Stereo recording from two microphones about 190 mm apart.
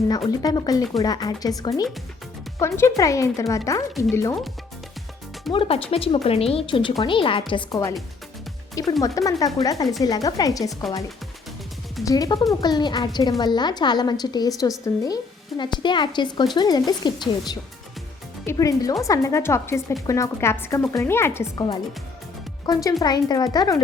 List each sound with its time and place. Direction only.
0.3 s a woman's voice: 20° left (ahead or behind)
5.5 s a woman's voice: 30° left (ahead or behind)
12.0 s a woman's voice: 20° left (ahead or behind)